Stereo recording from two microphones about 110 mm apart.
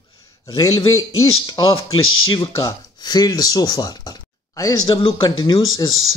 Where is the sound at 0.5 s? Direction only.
30° left (ahead or behind).